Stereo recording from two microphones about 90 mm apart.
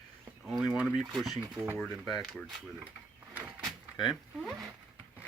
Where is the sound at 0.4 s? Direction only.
Centre (ahead or behind).